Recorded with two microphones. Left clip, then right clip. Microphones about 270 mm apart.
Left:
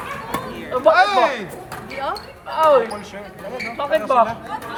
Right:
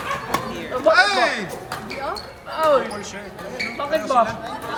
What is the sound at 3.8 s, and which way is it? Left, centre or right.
Speech, left.